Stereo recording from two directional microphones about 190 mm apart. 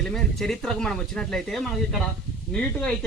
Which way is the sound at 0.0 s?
Centre (ahead or behind).